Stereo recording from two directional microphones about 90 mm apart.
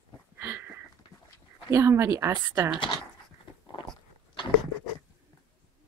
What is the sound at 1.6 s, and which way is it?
Speech, 30° right (ahead or behind).